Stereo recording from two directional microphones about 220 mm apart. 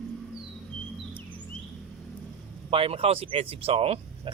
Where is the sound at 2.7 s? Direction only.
25° right (ahead or behind).